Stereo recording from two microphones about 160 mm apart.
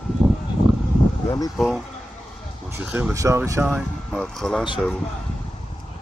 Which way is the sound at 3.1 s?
15° right (ahead or behind).